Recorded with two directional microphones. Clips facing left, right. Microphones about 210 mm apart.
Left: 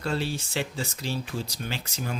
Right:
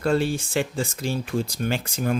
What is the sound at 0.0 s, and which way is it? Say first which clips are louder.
Speech: right 7 dB; 50° right (ahead or behind).